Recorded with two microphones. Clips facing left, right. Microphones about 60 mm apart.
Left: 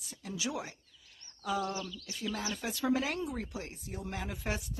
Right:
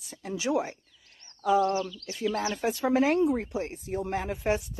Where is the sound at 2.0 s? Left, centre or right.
Right.